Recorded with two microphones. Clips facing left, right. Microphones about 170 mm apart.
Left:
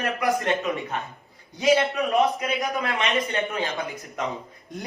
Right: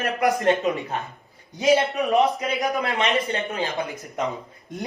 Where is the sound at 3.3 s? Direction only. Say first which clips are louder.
Even; 35° right (ahead or behind).